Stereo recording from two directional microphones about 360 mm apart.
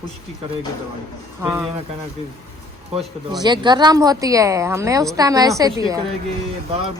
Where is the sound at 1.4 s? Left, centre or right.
Centre.